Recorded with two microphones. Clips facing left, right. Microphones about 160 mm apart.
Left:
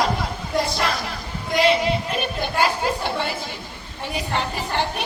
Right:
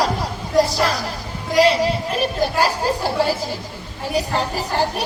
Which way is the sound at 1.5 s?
40° right (ahead or behind).